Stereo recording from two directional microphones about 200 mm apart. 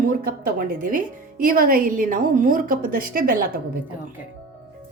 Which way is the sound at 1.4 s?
45° right (ahead or behind).